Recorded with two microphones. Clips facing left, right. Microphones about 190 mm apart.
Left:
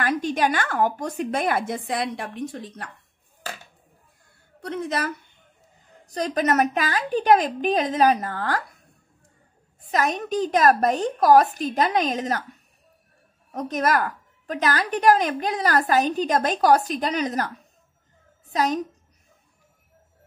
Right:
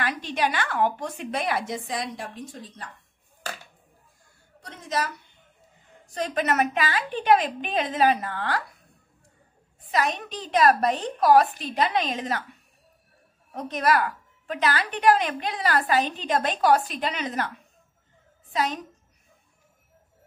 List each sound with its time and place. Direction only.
0.0 s a woman's voice: 45° left (ahead or behind); by 2.9 s 65° left (ahead or behind)
4.6 s a woman's voice: 60° left (ahead or behind)
6.0 s a woman's voice: 40° left (ahead or behind)
9.8 s a woman's voice: 45° left (ahead or behind)
13.5 s a woman's voice: 45° left (ahead or behind)
18.5 s a woman's voice: 40° left (ahead or behind)